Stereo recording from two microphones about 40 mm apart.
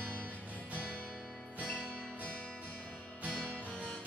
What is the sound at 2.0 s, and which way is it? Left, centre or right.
Music, left.